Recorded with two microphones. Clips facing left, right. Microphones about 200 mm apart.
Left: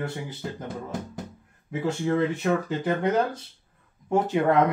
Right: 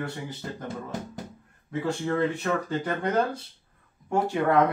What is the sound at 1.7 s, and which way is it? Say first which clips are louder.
Speech: left 2 dB; 20° left (ahead or behind).